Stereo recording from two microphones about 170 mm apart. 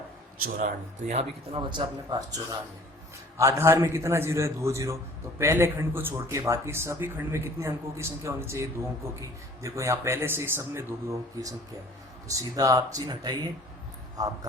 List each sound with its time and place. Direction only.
0.4 s speech: 45° right (ahead or behind)
1.5 s speech: 25° right (ahead or behind)